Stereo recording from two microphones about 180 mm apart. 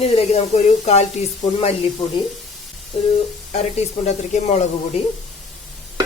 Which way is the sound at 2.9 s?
35° left (ahead or behind).